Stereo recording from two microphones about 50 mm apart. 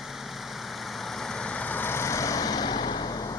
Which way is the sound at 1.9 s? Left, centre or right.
Left.